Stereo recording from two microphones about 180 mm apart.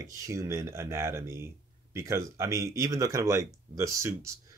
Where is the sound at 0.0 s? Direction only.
20° right (ahead or behind).